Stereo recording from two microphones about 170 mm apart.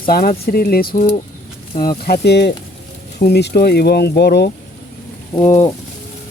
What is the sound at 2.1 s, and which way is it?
Speech, 75° left (ahead or behind).